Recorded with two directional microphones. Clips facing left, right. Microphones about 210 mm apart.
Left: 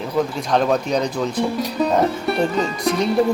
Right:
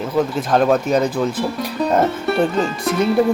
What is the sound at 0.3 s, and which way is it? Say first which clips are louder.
Speech: right 4 dB; 5° right (ahead or behind).